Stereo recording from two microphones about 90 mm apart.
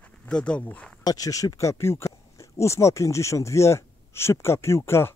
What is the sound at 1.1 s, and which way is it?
Speech, 40° left (ahead or behind).